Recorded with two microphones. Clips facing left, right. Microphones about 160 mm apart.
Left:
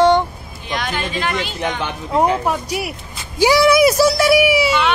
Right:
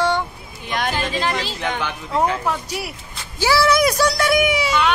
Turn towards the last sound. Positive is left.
turn(degrees=10)  # may be behind; listen again after turning